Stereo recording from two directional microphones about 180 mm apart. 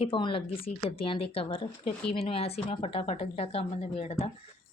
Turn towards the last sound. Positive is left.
turn(degrees=35)  # may be behind; listen again after turning